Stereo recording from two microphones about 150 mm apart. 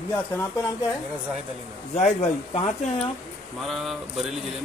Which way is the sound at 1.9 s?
45° left (ahead or behind).